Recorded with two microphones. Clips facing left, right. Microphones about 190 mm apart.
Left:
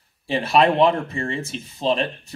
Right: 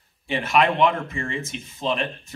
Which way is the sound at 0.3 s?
35° left (ahead or behind).